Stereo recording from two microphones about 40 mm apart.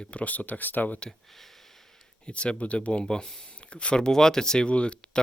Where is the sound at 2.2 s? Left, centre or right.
Left.